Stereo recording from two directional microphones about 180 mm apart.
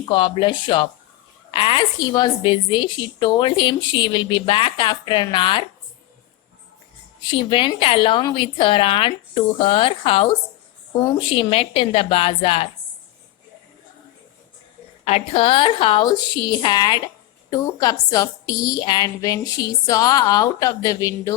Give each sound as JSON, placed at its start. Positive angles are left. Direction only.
{"t": 0.0, "sound": "a woman's voice", "side_deg": 25}
{"t": 7.2, "sound": "a woman's voice", "side_deg": 25}
{"t": 15.0, "sound": "a woman's voice", "side_deg": 35}